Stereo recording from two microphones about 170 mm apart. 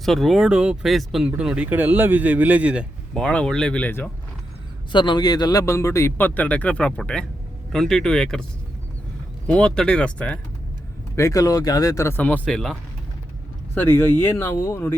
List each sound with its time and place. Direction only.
0.0 s speech: centre (ahead or behind)
3.2 s speech: 5° left (ahead or behind)
4.9 s speech: 25° left (ahead or behind); by 8.4 s 5° left (ahead or behind)
9.5 s speech: 5° left (ahead or behind)
13.7 s speech: 15° left (ahead or behind)